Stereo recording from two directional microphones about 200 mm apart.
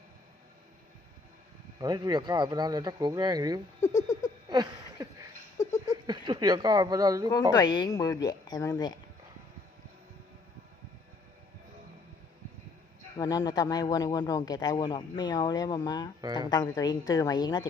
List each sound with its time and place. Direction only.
1.8 s speech: 20° right (ahead or behind)
3.8 s speech: 35° left (ahead or behind)
4.4 s a sound: 20° right (ahead or behind)
6.1 s speech: 20° right (ahead or behind)
7.5 s speech: 20° left (ahead or behind)
13.1 s speech: 20° left (ahead or behind)